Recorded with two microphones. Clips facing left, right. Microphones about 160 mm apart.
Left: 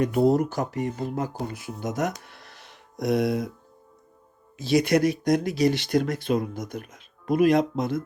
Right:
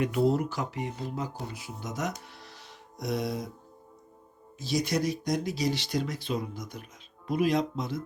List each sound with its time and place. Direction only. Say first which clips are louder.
0.0 s speech: left 5 dB; 45° left (ahead or behind)
2.2 s music: even; 60° left (ahead or behind)
4.5 s speech: left 8 dB; 65° left (ahead or behind)